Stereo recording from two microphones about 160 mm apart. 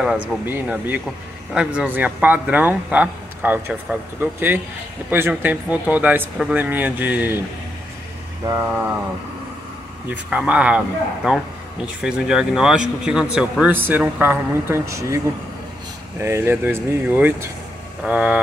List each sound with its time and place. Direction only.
0.0 s speech: 5° right (ahead or behind)
8.5 s speech: 20° right (ahead or behind)
10.0 s speech: 10° right (ahead or behind)